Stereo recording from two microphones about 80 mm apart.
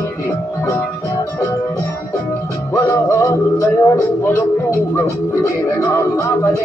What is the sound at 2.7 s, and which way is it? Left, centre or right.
Music, left.